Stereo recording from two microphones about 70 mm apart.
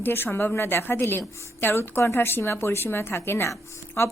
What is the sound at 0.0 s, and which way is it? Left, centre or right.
A woman's voice, left.